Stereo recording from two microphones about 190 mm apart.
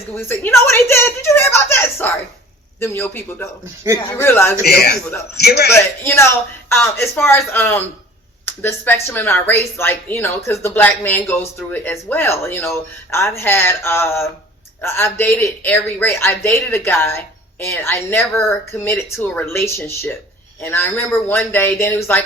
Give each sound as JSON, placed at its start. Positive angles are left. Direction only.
{"t": 0.2, "sound": "speech", "side_deg": 10}
{"t": 4.6, "sound": "a man's voice", "side_deg": 55}
{"t": 5.7, "sound": "speech", "side_deg": 15}